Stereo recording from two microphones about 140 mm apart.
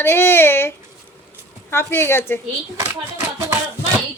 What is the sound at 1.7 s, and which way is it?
Speech, 20° left (ahead or behind).